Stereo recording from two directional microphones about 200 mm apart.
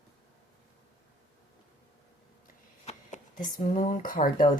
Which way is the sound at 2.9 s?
40° left (ahead or behind).